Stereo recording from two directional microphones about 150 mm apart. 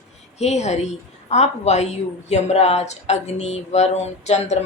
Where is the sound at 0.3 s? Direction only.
50° left (ahead or behind).